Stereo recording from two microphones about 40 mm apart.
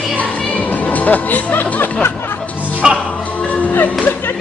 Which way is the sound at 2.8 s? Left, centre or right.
Centre.